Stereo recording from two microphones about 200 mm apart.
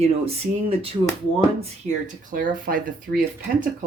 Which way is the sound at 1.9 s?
40° right (ahead or behind).